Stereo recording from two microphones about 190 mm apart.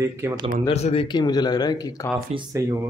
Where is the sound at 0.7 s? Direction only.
35° left (ahead or behind).